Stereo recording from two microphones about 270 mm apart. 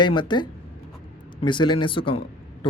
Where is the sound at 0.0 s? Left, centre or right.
Centre.